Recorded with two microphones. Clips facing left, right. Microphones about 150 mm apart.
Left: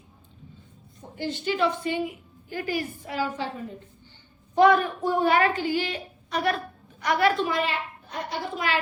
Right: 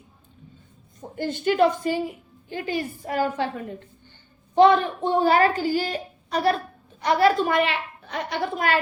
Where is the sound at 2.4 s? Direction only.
25° right (ahead or behind).